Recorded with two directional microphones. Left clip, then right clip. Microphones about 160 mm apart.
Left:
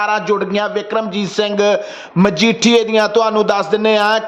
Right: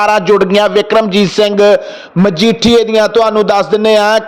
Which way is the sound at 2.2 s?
15° right (ahead or behind).